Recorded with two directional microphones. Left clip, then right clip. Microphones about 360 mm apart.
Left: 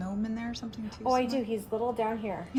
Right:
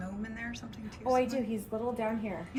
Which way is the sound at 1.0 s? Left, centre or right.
Centre.